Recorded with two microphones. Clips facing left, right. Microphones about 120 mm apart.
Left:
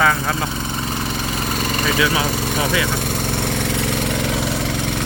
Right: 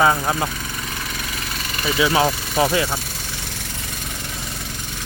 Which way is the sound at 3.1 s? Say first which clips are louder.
Left 12 dB; 60° left (ahead or behind).